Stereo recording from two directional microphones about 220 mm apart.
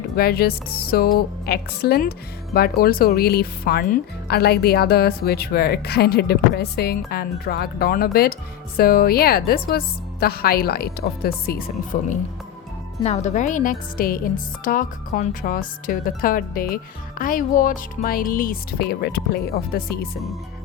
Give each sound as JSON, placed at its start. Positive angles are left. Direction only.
{"t": 0.2, "sound": "a woman's voice", "side_deg": 45}